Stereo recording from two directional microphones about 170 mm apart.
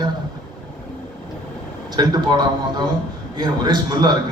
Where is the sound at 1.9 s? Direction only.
25° right (ahead or behind).